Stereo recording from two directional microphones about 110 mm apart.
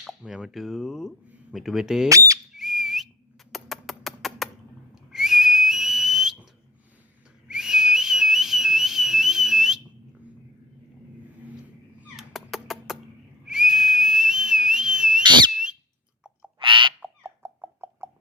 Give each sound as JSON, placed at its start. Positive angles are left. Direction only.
{"t": 0.0, "sound": "speech", "side_deg": -5}
{"t": 2.0, "sound": "speech", "side_deg": -30}
{"t": 2.6, "sound": "whistle", "side_deg": 0}
{"t": 3.5, "sound": "a sound", "side_deg": 0}
{"t": 5.1, "sound": "whistle", "side_deg": 0}
{"t": 11.9, "sound": "cat", "side_deg": 0}
{"t": 13.5, "sound": "whistle", "side_deg": -5}
{"t": 15.2, "sound": "whistle", "side_deg": -45}
{"t": 16.6, "sound": "bird", "side_deg": -50}
{"t": 17.0, "sound": "a sound", "side_deg": -20}